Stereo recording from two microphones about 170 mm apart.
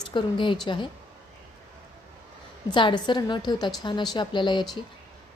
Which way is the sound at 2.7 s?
30° left (ahead or behind).